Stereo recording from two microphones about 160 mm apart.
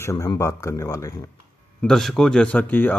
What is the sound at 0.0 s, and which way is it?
Speech, 20° left (ahead or behind).